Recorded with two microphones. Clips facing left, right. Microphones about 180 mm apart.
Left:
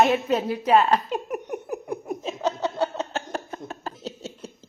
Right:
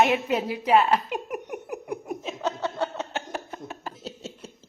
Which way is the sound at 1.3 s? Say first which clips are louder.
Left 3 dB; 30° left (ahead or behind).